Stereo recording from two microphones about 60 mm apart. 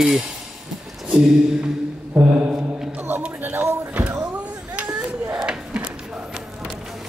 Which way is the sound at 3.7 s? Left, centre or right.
Right.